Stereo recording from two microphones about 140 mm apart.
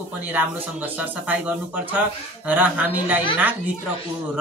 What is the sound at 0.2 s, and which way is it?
A woman's voice, 10° right (ahead or behind).